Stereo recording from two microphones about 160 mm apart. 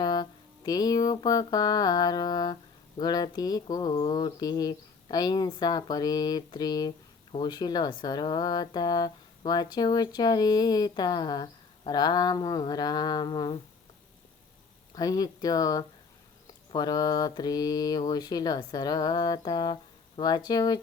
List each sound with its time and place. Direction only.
0.0 s a sound: 25° left (ahead or behind)
3.0 s speech: 25° left (ahead or behind)
14.9 s speech: 25° left (ahead or behind)